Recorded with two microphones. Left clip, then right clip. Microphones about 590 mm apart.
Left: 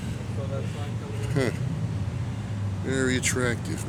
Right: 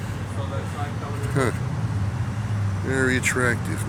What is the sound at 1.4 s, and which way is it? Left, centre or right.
Speech, left.